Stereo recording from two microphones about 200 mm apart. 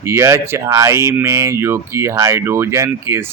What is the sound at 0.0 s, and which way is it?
Speech, 15° right (ahead or behind).